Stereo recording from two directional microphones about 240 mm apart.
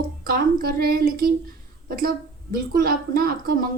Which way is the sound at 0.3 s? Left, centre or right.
Right.